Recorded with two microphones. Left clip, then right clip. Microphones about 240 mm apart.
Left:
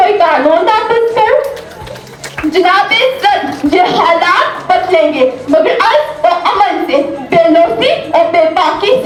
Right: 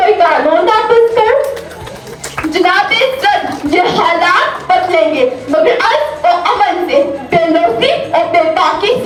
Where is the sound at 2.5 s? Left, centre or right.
Left.